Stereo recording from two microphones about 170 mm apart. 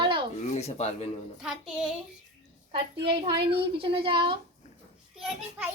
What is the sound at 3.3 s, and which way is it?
Speech, 70° right (ahead or behind).